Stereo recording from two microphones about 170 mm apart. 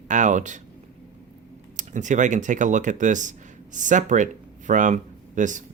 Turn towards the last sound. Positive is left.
turn(degrees=-50)  # may be behind; listen again after turning